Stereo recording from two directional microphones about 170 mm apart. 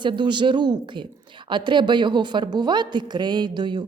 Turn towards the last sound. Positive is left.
turn(degrees=-25)  # may be behind; listen again after turning